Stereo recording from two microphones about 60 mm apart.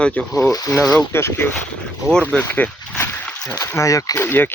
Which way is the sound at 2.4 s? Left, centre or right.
Left.